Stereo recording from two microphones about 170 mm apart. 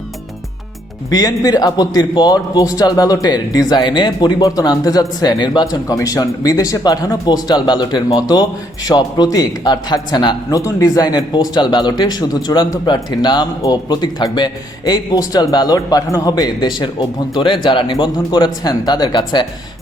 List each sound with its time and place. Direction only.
1.1 s speech: 20° left (ahead or behind)